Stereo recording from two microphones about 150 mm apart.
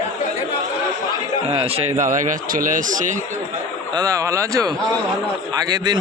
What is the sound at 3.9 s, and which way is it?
A man's voice, 20° right (ahead or behind).